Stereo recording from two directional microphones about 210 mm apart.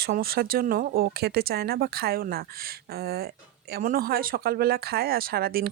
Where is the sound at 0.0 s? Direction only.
45° right (ahead or behind).